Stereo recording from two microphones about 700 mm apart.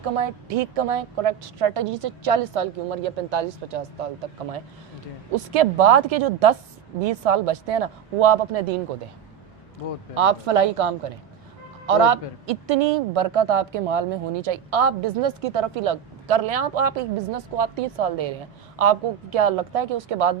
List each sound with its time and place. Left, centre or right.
0.2 s speech: right
5.5 s speech: right
10.2 s speech: right